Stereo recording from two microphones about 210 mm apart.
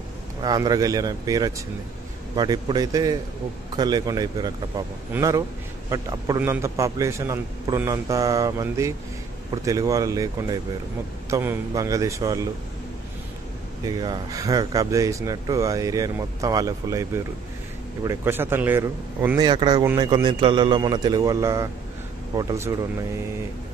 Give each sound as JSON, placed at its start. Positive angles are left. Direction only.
{"t": 0.4, "sound": "a man's voice", "side_deg": -20}
{"t": 13.8, "sound": "speech", "side_deg": -20}